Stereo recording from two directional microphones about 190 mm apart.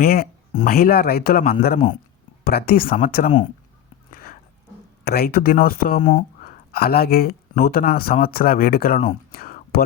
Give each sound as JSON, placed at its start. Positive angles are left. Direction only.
{"t": 0.0, "sound": "speech", "side_deg": 55}
{"t": 4.1, "sound": "a sound", "side_deg": 50}
{"t": 5.0, "sound": "speech", "side_deg": 55}